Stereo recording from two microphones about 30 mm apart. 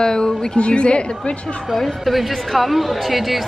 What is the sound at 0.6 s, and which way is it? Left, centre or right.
Speech, left.